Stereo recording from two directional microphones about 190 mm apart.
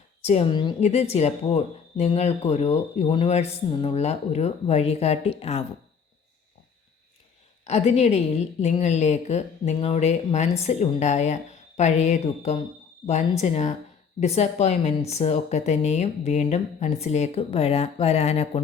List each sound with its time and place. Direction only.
0.3 s a woman's voice: 30° left (ahead or behind)
7.6 s speech: 35° left (ahead or behind)